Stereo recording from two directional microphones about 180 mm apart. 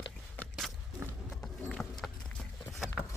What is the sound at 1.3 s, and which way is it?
Clip-clop, 5° left (ahead or behind).